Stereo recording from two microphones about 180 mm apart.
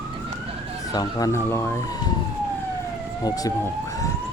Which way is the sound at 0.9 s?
20° left (ahead or behind).